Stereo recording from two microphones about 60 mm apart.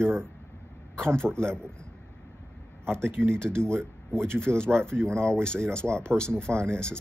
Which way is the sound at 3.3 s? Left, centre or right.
Centre.